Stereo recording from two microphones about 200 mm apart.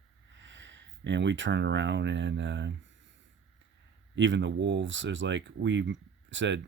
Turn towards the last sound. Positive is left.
turn(degrees=-65)  # may be behind; listen again after turning